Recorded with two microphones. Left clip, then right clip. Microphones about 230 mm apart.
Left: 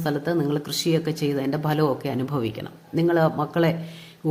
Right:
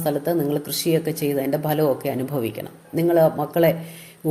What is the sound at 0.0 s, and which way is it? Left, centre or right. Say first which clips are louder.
Speech: right 3 dB; left.